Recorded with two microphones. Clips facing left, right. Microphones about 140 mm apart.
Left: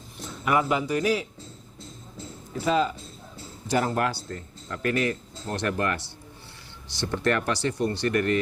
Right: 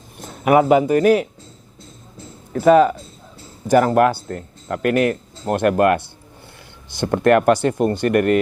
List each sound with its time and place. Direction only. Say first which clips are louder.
0.2 s a man's voice: right 10 dB; 50° right (ahead or behind)
2.5 s speech: right 12 dB; 60° right (ahead or behind)